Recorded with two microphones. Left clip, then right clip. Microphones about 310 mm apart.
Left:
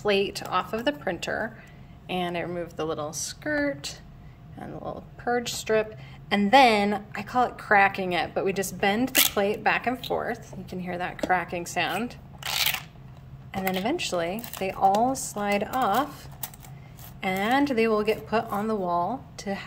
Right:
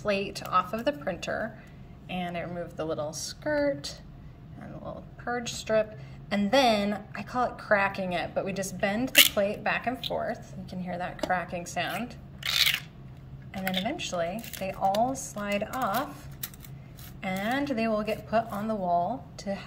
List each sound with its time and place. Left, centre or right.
0.0 s a woman's voice: centre
4.6 s a woman's voice: centre
13.5 s a woman's voice: centre
17.2 s a woman's voice: centre